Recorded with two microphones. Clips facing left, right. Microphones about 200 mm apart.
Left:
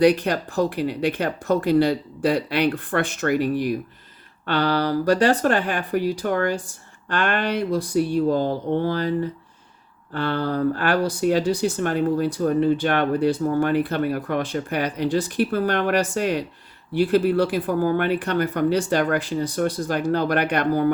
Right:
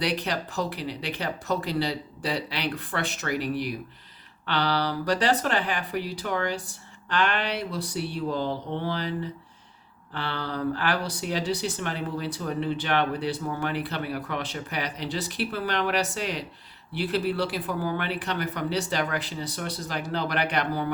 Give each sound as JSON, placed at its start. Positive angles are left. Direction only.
{"t": 0.0, "sound": "speech", "side_deg": 50}